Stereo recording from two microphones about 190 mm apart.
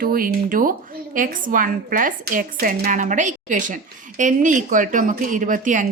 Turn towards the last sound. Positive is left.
turn(degrees=-45)  # may be behind; listen again after turning